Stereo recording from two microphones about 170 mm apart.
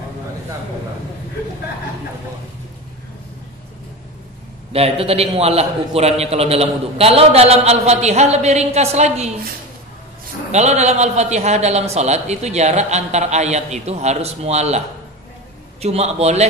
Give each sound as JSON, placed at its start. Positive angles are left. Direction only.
{"t": 4.7, "sound": "a man's voice", "side_deg": -35}
{"t": 10.5, "sound": "a man's voice", "side_deg": -40}
{"t": 15.8, "sound": "a man's voice", "side_deg": -40}